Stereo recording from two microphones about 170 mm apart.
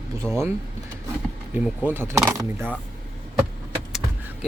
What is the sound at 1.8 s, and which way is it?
Speech, 15° right (ahead or behind).